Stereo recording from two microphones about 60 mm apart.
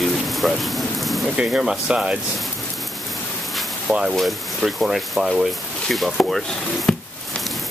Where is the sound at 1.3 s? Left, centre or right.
Centre.